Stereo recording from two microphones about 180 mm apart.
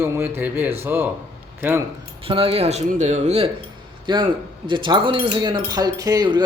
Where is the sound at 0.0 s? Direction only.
10° right (ahead or behind).